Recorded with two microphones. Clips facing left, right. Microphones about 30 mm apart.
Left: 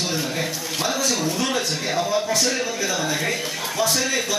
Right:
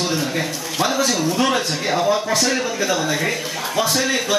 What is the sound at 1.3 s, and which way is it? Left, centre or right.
A man's voice, right.